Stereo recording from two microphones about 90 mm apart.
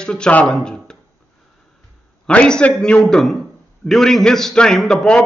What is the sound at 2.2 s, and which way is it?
A man's voice, 10° left (ahead or behind).